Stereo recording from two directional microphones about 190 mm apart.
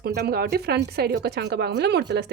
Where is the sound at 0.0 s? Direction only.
60° right (ahead or behind).